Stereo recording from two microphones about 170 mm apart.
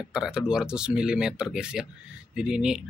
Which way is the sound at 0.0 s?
5° right (ahead or behind).